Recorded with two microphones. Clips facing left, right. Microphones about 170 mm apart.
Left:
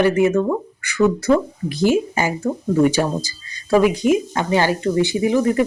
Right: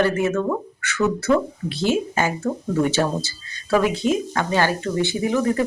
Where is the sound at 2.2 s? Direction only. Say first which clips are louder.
Left 1 dB; 10° left (ahead or behind).